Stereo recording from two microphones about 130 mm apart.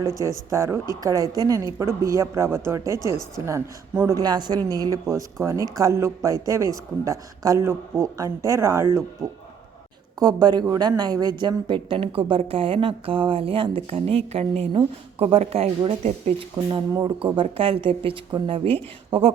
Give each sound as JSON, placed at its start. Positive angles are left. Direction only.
{"t": 0.5, "sound": "speech", "side_deg": -20}
{"t": 4.2, "sound": "speech", "side_deg": -35}
{"t": 9.2, "sound": "a man's voice", "side_deg": 5}
{"t": 10.2, "sound": "a woman's voice", "side_deg": -30}
{"t": 16.4, "sound": "a woman's voice", "side_deg": -40}